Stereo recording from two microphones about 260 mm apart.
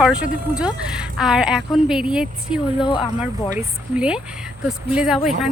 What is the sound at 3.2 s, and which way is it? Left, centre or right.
Speech, centre.